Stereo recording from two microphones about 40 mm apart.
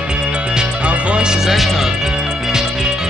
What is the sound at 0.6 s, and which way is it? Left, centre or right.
Music, right.